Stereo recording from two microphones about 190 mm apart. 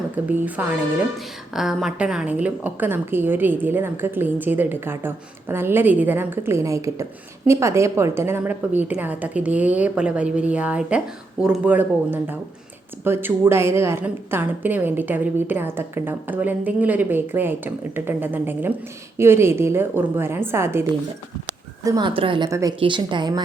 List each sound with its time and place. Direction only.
0.3 s a woman's voice: 10° right (ahead or behind)
21.8 s speech: 25° right (ahead or behind)
22.4 s a woman's voice: 15° right (ahead or behind)